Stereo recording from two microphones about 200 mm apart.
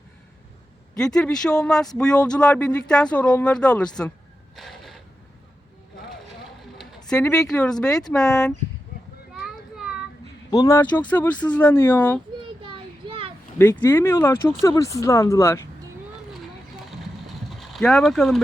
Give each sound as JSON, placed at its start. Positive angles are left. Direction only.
{"t": 0.9, "sound": "speech", "side_deg": 5}
{"t": 4.5, "sound": "a sound", "side_deg": 0}
{"t": 6.7, "sound": "speech", "side_deg": 5}
{"t": 10.5, "sound": "speech", "side_deg": 15}
{"t": 12.4, "sound": "a sound", "side_deg": -25}
{"t": 13.6, "sound": "speech", "side_deg": 15}
{"t": 17.6, "sound": "speech", "side_deg": 0}